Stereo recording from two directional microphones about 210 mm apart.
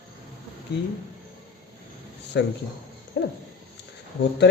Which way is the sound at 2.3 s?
55° left (ahead or behind).